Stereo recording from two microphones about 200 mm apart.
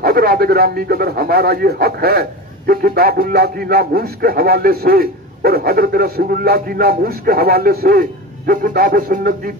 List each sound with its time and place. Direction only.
0.0 s a man's voice: 50° right (ahead or behind)